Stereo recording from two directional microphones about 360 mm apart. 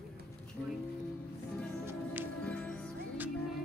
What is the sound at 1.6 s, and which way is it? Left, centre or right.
Music, centre.